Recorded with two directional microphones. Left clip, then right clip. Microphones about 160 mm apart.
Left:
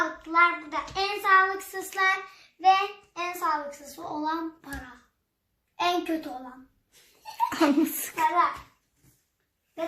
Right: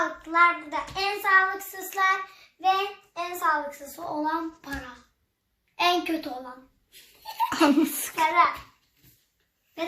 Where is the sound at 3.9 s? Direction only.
10° right (ahead or behind).